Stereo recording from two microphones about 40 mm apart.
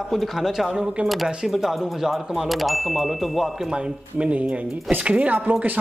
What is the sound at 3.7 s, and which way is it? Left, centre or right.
Speech, right.